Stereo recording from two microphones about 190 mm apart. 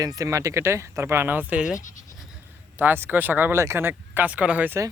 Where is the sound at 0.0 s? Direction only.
20° right (ahead or behind).